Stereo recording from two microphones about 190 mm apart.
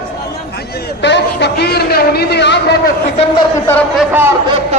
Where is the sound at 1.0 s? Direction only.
65° left (ahead or behind).